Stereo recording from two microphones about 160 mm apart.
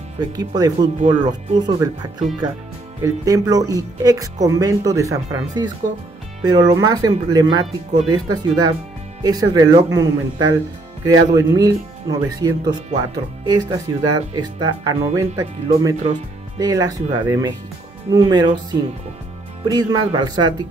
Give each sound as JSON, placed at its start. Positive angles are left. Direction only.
{"t": 0.6, "sound": "speech", "side_deg": -25}